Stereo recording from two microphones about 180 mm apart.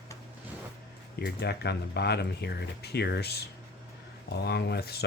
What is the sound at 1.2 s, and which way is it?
Speech, 65° left (ahead or behind).